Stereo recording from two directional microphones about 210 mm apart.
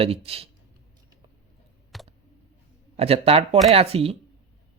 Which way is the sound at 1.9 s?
Centre (ahead or behind).